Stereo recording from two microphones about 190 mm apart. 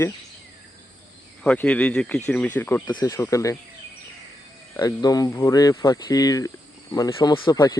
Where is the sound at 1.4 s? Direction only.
5° left (ahead or behind).